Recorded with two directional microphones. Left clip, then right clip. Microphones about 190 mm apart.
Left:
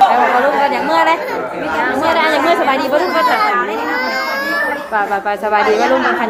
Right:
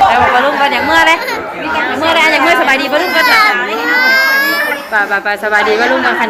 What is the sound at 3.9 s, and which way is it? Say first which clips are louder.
Baby cry: right 13 dB; 25° left (ahead or behind).